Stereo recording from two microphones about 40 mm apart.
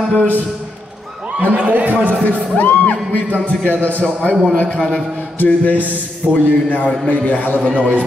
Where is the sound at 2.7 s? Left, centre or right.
Left.